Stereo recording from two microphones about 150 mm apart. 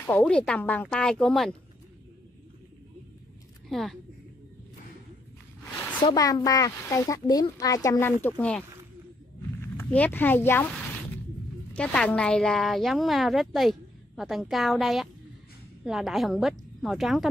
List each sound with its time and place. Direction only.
0.2 s a woman's voice: 5° left (ahead or behind)
3.6 s a woman's voice: centre (ahead or behind)
6.1 s speech: 25° left (ahead or behind); by 8.6 s 10° left (ahead or behind)
9.8 s speech: 10° left (ahead or behind)
11.7 s a woman's voice: 5° left (ahead or behind)